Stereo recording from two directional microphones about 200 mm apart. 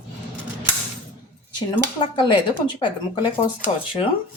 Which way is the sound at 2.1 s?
25° left (ahead or behind).